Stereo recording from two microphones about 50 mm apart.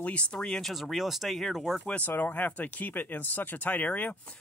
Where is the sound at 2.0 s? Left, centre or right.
Left.